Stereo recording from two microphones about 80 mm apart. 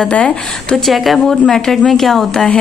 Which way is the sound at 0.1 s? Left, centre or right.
Centre.